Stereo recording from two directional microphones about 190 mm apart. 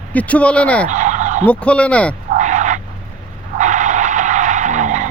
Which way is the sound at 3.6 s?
40° right (ahead or behind).